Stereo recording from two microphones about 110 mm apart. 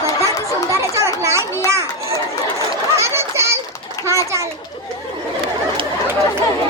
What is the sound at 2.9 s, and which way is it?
Children playing, 25° right (ahead or behind).